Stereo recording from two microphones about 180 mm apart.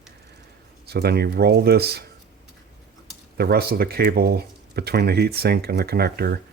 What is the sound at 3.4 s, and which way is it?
Speech, 60° right (ahead or behind).